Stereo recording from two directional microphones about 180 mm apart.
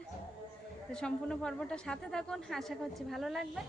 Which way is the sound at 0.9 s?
5° left (ahead or behind).